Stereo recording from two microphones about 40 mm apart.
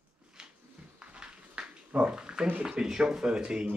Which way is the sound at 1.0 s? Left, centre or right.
Right.